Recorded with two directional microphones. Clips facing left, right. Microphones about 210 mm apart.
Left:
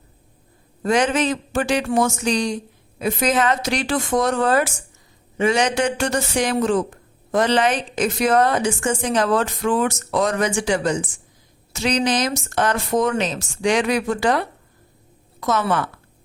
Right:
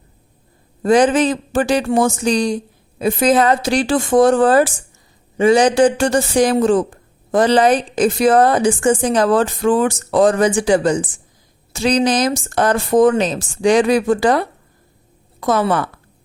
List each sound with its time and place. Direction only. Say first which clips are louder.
0.8 s a man's voice: right 6 dB; 35° right (ahead or behind)